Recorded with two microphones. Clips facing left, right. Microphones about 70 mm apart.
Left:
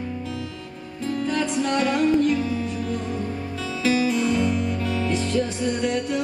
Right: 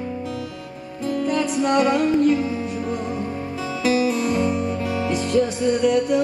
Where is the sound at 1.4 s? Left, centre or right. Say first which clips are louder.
Right 5 dB; centre.